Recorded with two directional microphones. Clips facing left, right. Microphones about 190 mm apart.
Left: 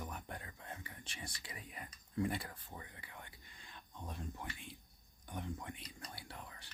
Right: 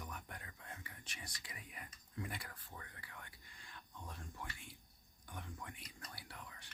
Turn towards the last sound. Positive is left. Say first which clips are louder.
# left 3 dB
turn(degrees=35)  # may be behind; listen again after turning